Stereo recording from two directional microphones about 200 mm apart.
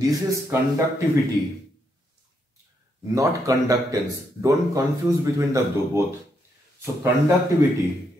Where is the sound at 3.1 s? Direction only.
15° right (ahead or behind).